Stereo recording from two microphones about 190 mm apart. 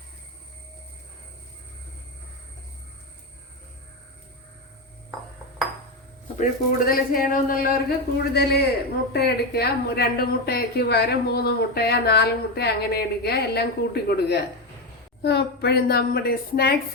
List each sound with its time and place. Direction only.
6.4 s a woman's voice: 50° left (ahead or behind)